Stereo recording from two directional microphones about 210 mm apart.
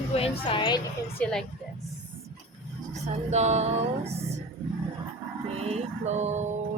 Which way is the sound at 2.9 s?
30° right (ahead or behind).